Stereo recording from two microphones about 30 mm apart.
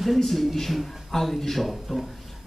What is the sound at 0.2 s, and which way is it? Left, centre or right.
A man's voice, centre.